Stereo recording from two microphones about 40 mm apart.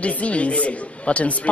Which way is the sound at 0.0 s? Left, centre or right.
Left.